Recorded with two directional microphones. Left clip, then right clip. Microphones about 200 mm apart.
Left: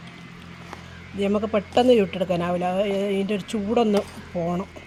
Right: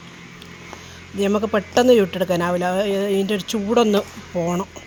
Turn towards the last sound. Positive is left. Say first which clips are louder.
# right 4 dB
turn(degrees=-15)  # may be behind; listen again after turning